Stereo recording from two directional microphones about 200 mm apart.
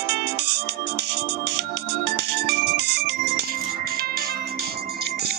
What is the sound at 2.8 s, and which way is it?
Music, 55° right (ahead or behind).